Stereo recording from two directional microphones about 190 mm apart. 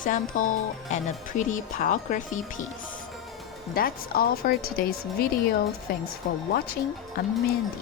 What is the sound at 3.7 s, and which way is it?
Speech, 50° left (ahead or behind).